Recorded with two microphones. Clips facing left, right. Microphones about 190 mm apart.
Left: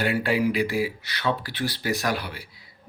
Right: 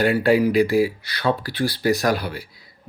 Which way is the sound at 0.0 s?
40° right (ahead or behind).